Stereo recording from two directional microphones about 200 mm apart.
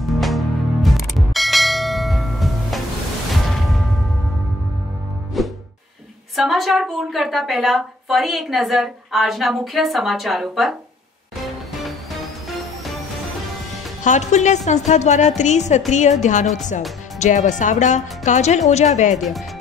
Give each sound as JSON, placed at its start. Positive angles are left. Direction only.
{"t": 0.1, "sound": "church bell", "side_deg": 0}
{"t": 5.4, "sound": "music", "side_deg": 0}
{"t": 6.3, "sound": "a woman's voice", "side_deg": 0}
{"t": 12.4, "sound": "music", "side_deg": 0}
{"t": 14.0, "sound": "a woman's voice", "side_deg": 35}